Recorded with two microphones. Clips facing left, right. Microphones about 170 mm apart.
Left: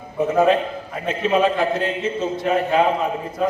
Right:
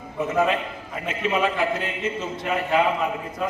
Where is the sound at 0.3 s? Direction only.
35° left (ahead or behind).